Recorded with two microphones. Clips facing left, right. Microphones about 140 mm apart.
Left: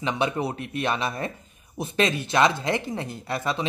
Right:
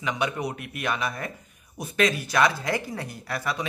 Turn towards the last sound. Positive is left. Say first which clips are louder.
# left 3 dB
turn(degrees=25)  # may be behind; listen again after turning